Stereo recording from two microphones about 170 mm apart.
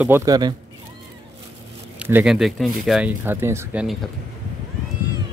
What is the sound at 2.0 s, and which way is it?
Speech, 10° right (ahead or behind).